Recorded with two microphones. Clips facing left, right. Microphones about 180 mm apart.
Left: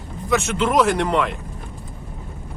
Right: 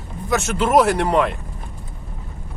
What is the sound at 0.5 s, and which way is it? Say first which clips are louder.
Speech: right 6 dB; 40° right (ahead or behind).